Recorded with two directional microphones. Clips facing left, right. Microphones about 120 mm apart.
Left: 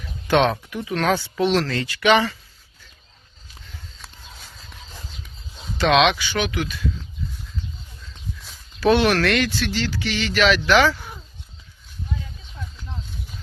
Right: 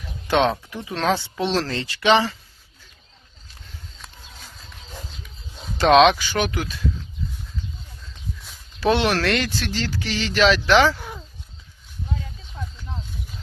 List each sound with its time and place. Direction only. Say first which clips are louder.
0.7 s speech: left 1 dB; 25° right (ahead or behind)
4.0 s a sound: even; centre (ahead or behind)
5.7 s speech: right 3 dB; 40° right (ahead or behind)
8.8 s speech: left 2 dB; 25° right (ahead or behind)